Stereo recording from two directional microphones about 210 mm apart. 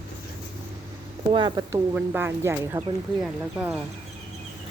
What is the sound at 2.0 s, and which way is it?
Speech, 10° right (ahead or behind).